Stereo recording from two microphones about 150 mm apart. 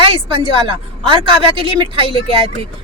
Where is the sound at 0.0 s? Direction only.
40° right (ahead or behind).